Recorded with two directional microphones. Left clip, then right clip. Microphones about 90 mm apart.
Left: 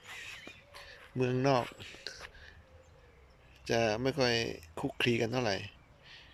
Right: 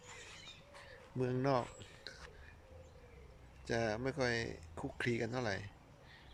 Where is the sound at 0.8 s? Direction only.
Centre (ahead or behind).